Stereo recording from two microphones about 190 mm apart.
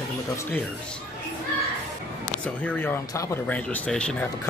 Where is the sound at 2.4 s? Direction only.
5° left (ahead or behind).